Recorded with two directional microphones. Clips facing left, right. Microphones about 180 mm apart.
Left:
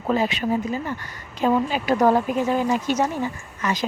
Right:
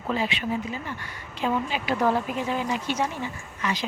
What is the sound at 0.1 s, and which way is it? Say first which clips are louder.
Speech: left 5 dB; 40° left (ahead or behind).